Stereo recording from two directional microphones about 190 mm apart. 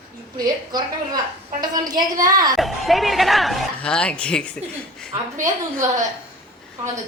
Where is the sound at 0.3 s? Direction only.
20° right (ahead or behind).